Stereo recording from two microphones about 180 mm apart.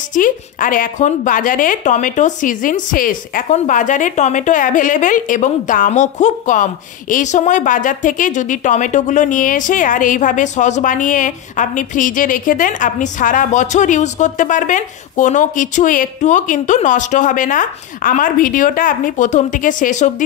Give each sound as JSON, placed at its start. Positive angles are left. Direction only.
{"t": 0.1, "sound": "a woman's voice", "side_deg": 50}